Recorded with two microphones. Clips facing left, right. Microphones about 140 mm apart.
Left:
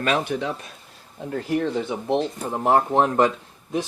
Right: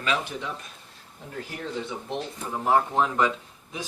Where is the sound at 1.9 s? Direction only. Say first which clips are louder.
Left 9 dB; 75° left (ahead or behind).